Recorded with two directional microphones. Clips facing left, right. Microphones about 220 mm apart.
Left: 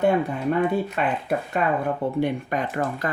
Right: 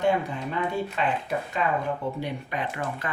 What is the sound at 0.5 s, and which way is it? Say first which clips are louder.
Speech: left 5 dB; 55° left (ahead or behind).